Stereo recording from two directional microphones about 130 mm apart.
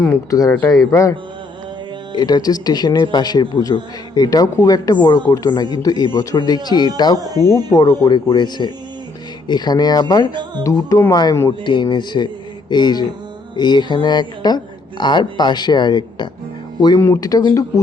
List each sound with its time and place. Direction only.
0.3 s speech: 25° left (ahead or behind)
2.1 s speech: 30° left (ahead or behind)